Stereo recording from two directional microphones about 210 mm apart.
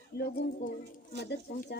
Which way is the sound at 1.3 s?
50° left (ahead or behind).